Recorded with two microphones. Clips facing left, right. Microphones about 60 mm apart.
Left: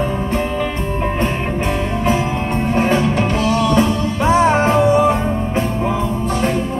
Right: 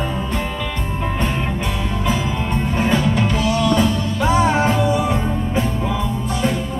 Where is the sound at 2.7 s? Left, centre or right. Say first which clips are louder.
Left 3 dB; left.